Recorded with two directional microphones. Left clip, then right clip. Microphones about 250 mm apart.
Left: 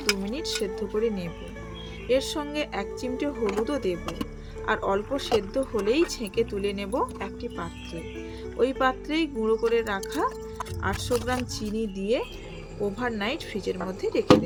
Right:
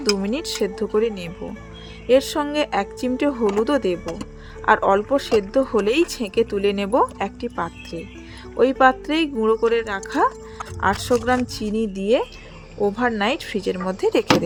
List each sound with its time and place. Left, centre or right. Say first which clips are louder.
0.2 s speech: right 6 dB; right